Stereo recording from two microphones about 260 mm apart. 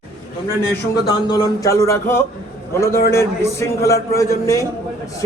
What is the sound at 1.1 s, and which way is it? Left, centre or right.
A man's voice, centre.